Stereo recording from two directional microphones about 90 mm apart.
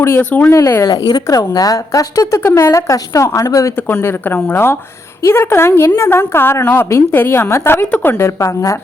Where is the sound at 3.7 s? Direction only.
20° left (ahead or behind).